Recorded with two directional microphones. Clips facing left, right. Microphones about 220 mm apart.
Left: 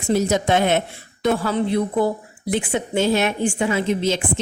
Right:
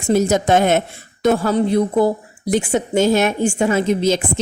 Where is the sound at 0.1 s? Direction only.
45° right (ahead or behind).